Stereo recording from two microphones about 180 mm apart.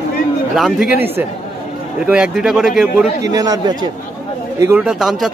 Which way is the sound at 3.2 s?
20° right (ahead or behind).